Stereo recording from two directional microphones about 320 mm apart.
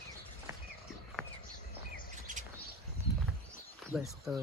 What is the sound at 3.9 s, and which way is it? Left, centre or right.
Speech, centre.